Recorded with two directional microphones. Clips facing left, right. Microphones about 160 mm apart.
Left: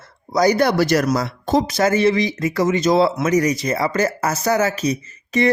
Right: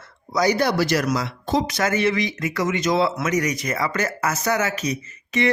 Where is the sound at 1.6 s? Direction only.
30° left (ahead or behind).